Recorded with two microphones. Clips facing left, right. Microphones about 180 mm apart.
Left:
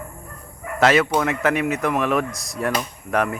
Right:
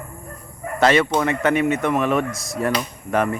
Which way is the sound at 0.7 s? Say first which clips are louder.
Even; centre (ahead or behind).